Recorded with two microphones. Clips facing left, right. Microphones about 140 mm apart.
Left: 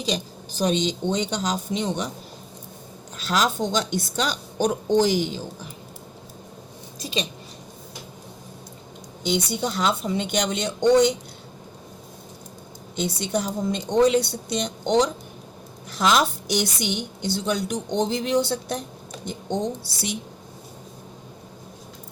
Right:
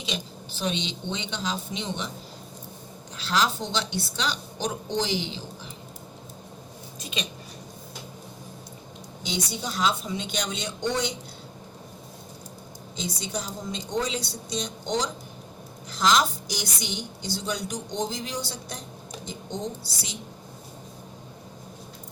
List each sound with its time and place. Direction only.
0.1 s a woman's voice: 40° left (ahead or behind)
3.2 s speech: 45° left (ahead or behind)
7.0 s a sound: 35° left (ahead or behind)
9.2 s a woman's voice: 60° left (ahead or behind)
13.0 s a woman's voice: 65° left (ahead or behind)